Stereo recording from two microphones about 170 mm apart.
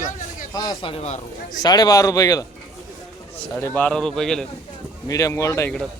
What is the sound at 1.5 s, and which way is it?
Speech, 25° left (ahead or behind).